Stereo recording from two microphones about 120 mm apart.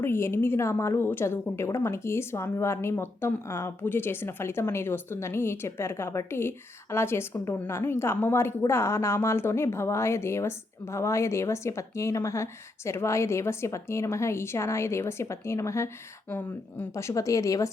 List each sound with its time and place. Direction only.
0.0 s a woman's voice: 20° left (ahead or behind)
16.9 s a woman's voice: 25° left (ahead or behind)